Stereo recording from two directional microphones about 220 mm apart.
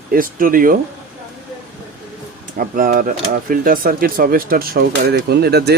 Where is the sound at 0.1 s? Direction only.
40° right (ahead or behind).